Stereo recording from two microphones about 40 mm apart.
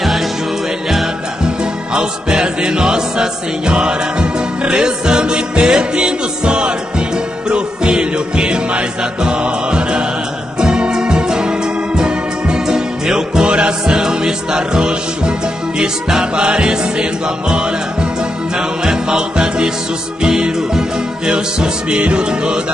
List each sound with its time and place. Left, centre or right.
1.4 s music: right
18.9 s music: centre